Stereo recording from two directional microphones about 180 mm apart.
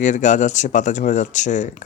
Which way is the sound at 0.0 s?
45° left (ahead or behind).